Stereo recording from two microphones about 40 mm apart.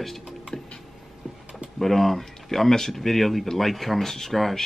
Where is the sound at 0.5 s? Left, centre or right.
Left.